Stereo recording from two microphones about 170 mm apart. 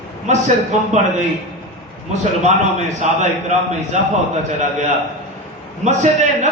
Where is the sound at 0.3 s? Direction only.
45° right (ahead or behind).